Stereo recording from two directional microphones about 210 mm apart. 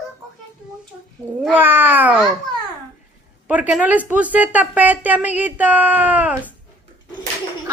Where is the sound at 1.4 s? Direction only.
10° right (ahead or behind).